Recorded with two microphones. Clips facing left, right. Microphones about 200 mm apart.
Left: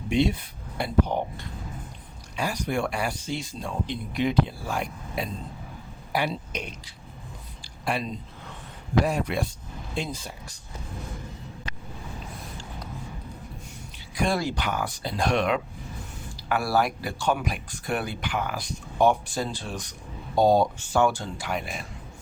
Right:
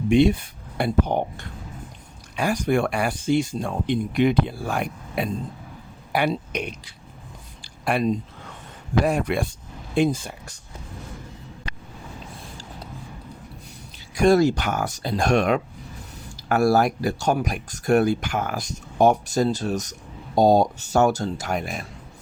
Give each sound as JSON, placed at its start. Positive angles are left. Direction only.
{"t": 0.1, "sound": "speech", "side_deg": -55}
{"t": 7.9, "sound": "speech", "side_deg": -55}
{"t": 12.4, "sound": "a sound", "side_deg": -30}
{"t": 14.2, "sound": "speech", "side_deg": -45}